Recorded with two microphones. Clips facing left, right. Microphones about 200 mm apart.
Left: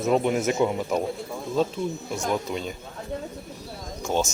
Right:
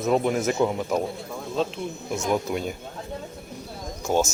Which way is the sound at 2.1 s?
25° right (ahead or behind).